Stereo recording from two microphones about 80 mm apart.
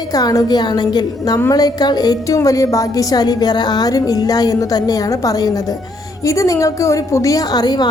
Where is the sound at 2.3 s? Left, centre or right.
Left.